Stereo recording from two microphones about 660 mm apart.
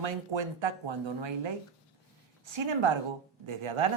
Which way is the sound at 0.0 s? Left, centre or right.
Right.